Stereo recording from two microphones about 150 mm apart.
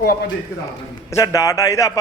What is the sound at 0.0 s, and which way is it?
Speech, 90° left.